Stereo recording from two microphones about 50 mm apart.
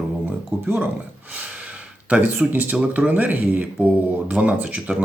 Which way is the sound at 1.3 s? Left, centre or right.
Right.